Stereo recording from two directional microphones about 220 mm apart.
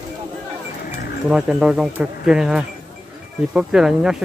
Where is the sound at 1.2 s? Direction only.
5° right (ahead or behind).